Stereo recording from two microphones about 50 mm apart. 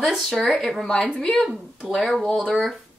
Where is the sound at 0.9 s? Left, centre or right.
Left.